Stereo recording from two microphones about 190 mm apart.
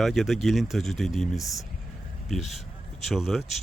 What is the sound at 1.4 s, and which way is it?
Speech, 15° left (ahead or behind).